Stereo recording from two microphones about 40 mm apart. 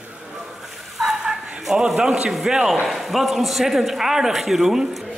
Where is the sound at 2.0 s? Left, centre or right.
Centre.